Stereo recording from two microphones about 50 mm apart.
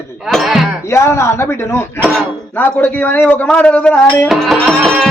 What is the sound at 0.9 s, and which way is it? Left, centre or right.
Speech, left.